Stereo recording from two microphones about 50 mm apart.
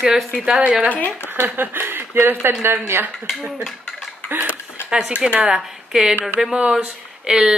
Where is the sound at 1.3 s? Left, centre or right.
Right.